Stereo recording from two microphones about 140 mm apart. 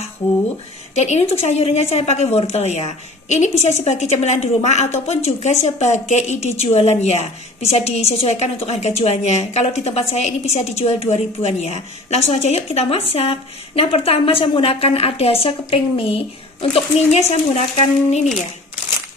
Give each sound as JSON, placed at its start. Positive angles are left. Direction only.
{"t": 0.2, "sound": "a woman's voice", "side_deg": 50}